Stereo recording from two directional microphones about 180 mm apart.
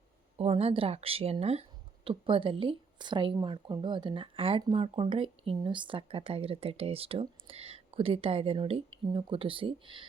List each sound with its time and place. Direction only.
0.3 s speech: 30° right (ahead or behind)